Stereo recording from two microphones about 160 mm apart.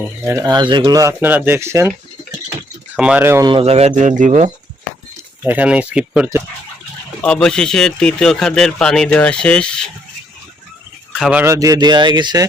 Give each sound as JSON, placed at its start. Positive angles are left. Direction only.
{"t": 0.3, "sound": "speech", "side_deg": -25}
{"t": 2.9, "sound": "speech", "side_deg": -10}
{"t": 3.4, "sound": "speech", "side_deg": -35}
{"t": 5.4, "sound": "speech", "side_deg": -10}
{"t": 7.2, "sound": "speech", "side_deg": 5}
{"t": 11.1, "sound": "speech", "side_deg": -5}